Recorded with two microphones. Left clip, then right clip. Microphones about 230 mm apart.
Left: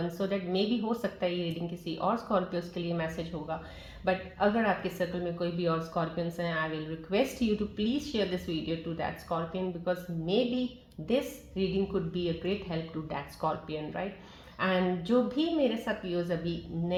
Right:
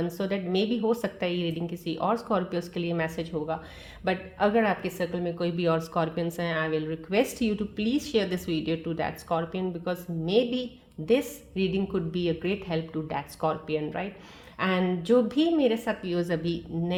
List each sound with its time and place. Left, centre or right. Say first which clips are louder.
0.2 s a woman's voice: right 2 dB; right